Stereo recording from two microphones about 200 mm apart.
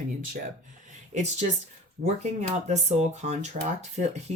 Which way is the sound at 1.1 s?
35° right (ahead or behind).